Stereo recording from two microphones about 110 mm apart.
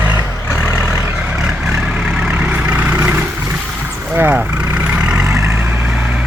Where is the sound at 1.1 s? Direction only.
5° right (ahead or behind).